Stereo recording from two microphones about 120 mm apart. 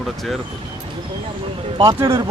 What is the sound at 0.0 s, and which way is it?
Speech, centre (ahead or behind).